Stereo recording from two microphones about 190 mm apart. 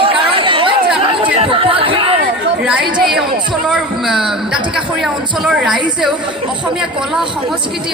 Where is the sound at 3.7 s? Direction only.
Centre (ahead or behind).